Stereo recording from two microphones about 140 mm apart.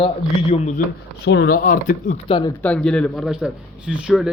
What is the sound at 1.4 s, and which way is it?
Speech, 80° left.